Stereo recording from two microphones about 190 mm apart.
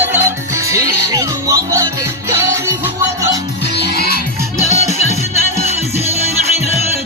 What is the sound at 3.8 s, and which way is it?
Music, 55° left (ahead or behind).